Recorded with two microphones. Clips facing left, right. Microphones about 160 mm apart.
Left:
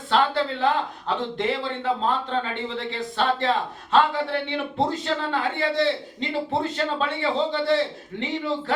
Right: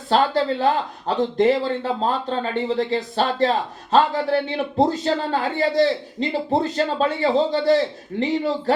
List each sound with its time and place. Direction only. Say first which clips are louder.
0.1 s a man's voice: right 3 dB; 40° right (ahead or behind)